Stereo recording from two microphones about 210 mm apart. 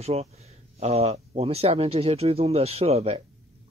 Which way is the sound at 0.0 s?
30° right (ahead or behind).